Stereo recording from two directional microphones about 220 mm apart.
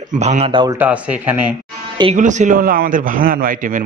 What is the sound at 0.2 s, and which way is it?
Speech, 30° right (ahead or behind).